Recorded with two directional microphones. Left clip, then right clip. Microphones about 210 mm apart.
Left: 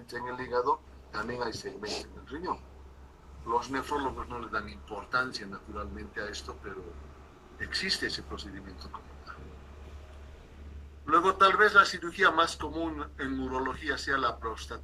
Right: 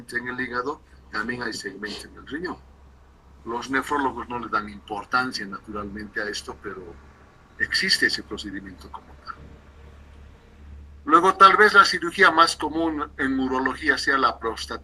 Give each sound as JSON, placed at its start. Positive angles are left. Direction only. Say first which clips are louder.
{"t": 0.1, "sound": "a man's voice", "louder": "right 5 dB", "side_deg": -45}
{"t": 1.8, "sound": "speech", "louder": "right 3 dB", "side_deg": 5}
{"t": 2.2, "sound": "a man's voice", "louder": "right 8 dB", "side_deg": -45}
{"t": 3.5, "sound": "a man's voice", "louder": "right 5 dB", "side_deg": -50}
{"t": 7.6, "sound": "a man's voice", "louder": "right 11 dB", "side_deg": -50}
{"t": 11.0, "sound": "a man's voice", "louder": "right 9 dB", "side_deg": -45}